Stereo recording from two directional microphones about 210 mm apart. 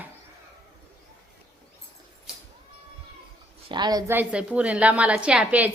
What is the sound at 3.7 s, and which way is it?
A woman's voice, 20° right (ahead or behind).